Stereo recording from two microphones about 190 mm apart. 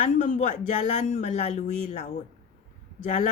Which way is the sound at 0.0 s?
40° left (ahead or behind).